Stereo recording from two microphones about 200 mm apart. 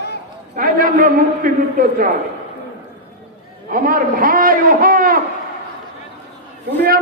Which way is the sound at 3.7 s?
45° right (ahead or behind).